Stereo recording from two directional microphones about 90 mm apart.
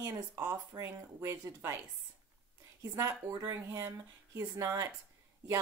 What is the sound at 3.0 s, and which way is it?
Speech, 40° right (ahead or behind).